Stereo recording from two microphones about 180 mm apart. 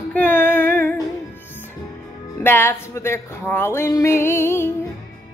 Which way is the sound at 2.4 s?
10° left (ahead or behind).